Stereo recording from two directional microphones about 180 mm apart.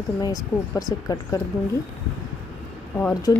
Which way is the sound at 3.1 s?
20° left (ahead or behind).